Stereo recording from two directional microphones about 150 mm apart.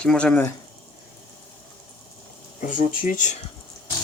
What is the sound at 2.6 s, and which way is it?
Speech, 65° left (ahead or behind).